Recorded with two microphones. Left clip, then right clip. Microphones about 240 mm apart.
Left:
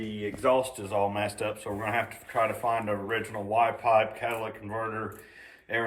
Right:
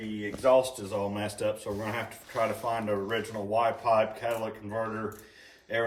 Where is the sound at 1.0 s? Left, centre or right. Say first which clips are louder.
Left 4 dB; centre.